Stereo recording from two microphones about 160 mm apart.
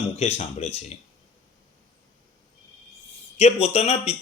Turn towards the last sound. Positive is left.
turn(degrees=40)  # may be behind; listen again after turning